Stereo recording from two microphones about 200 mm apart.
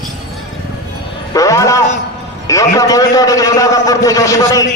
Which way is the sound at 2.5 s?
15° left (ahead or behind).